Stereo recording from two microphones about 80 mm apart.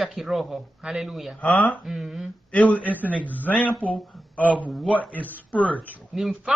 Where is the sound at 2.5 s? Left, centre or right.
Centre.